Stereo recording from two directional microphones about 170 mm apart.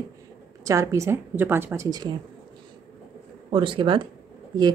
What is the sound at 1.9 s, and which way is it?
Speech, 25° right (ahead or behind).